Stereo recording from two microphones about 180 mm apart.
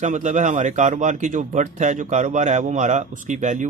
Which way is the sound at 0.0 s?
45° right (ahead or behind).